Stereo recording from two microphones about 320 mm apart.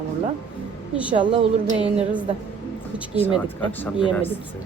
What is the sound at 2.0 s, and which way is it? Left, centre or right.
Speech, centre.